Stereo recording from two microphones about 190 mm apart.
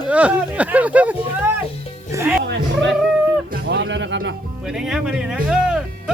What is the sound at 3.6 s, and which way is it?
Music, 65° right (ahead or behind).